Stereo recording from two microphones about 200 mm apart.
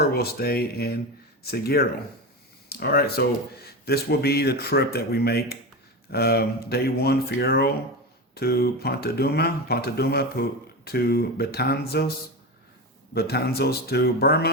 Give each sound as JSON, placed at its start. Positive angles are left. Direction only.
{"t": 0.0, "sound": "speech", "side_deg": 50}
{"t": 13.1, "sound": "speech", "side_deg": 50}